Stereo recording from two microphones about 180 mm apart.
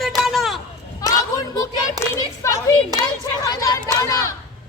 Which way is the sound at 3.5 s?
20° left (ahead or behind).